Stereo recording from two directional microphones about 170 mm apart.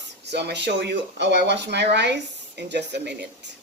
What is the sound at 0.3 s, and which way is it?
Speech, 80° right.